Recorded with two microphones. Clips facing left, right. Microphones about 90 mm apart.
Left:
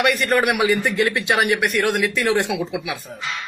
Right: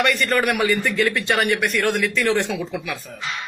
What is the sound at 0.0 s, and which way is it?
A man's voice, 10° left (ahead or behind).